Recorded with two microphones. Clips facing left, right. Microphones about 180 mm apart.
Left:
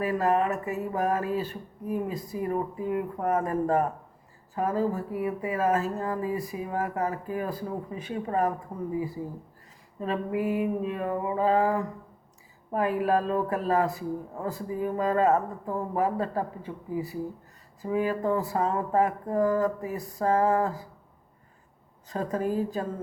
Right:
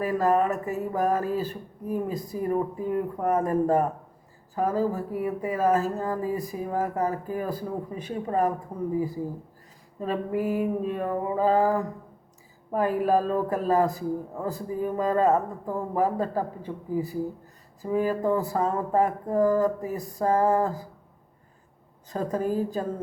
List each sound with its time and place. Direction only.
0.0 s speech: 40° right (ahead or behind)
10.0 s speech: 40° right (ahead or behind)
22.1 s speech: 35° right (ahead or behind)